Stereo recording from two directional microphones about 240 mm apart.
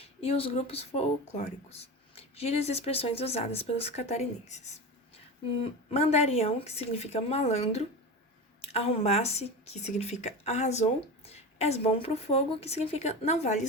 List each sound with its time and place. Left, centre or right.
0.0 s speech: left
5.9 s speech: left